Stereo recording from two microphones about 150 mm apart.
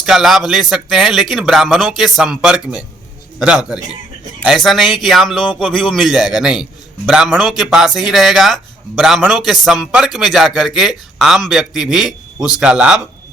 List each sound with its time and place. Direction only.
0.0 s a man's voice: centre (ahead or behind)